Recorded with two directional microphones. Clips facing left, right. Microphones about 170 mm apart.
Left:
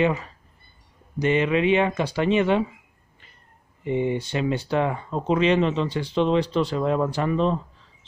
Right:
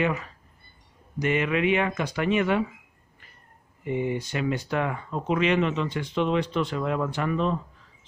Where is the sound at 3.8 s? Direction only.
25° left (ahead or behind).